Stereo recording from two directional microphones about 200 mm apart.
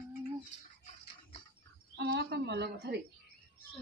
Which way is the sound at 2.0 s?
55° right (ahead or behind).